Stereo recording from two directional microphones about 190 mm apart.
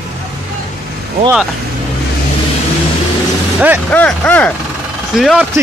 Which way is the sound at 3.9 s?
10° left (ahead or behind).